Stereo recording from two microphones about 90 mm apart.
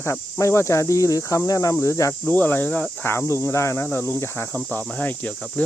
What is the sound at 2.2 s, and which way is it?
Cricket, 20° left (ahead or behind).